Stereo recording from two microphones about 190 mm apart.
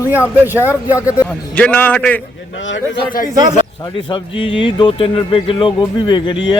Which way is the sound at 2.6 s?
75° left (ahead or behind).